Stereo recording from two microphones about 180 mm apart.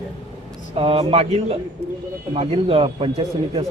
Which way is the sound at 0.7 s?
30° right (ahead or behind).